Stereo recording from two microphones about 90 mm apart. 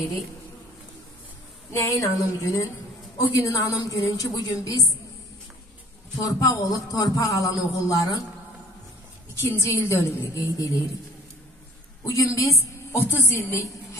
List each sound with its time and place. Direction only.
1.7 s a woman's voice: 35° left (ahead or behind); by 4.8 s 50° left (ahead or behind)
6.2 s speech: 40° left (ahead or behind)
9.3 s speech: 30° left (ahead or behind)
12.0 s a woman's voice: 35° left (ahead or behind)